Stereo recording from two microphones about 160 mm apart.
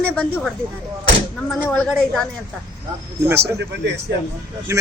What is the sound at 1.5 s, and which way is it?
Speech, 10° left (ahead or behind).